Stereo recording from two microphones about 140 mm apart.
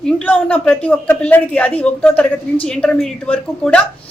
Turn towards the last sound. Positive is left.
turn(degrees=5)  # may be behind; listen again after turning